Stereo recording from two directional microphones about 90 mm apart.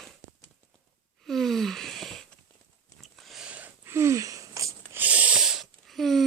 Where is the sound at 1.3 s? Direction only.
5° left (ahead or behind).